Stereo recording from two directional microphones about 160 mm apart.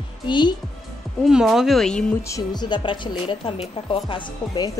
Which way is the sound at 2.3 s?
25° left (ahead or behind).